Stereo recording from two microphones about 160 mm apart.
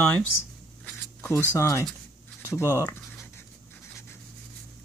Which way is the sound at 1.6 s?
15° left (ahead or behind).